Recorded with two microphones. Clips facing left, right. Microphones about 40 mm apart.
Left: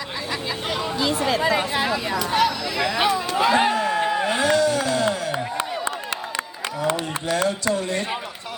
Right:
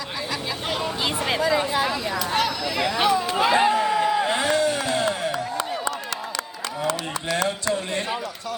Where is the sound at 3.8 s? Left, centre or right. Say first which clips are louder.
Right 1 dB; left.